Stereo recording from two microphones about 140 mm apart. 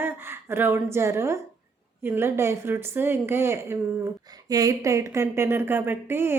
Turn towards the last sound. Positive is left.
turn(degrees=-15)  # may be behind; listen again after turning